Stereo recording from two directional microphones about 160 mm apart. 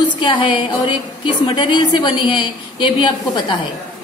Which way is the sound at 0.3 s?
30° left (ahead or behind).